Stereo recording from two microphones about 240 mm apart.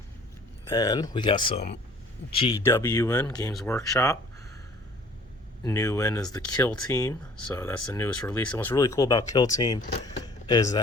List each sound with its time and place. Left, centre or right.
0.7 s speech: centre
5.6 s speech: centre
10.2 s a sound: centre